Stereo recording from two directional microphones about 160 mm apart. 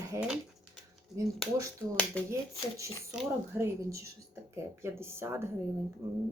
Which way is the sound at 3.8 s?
20° right (ahead or behind).